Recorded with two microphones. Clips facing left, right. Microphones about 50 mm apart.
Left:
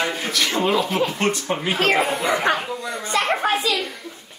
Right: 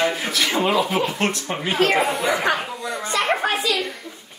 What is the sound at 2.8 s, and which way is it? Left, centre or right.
Speech, right.